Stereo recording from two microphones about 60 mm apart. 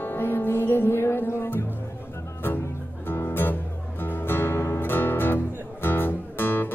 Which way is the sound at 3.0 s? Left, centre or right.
Left.